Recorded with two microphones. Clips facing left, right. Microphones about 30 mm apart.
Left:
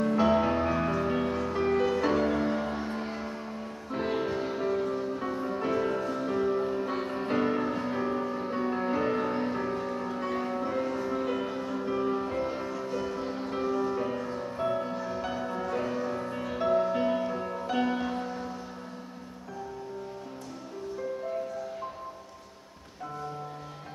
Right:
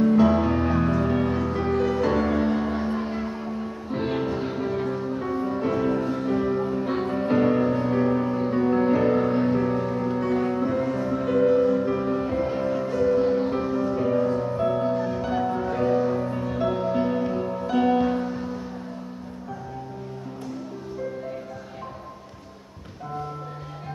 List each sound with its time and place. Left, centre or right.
0.0 s music: centre
2.2 s music: centre
13.2 s music: centre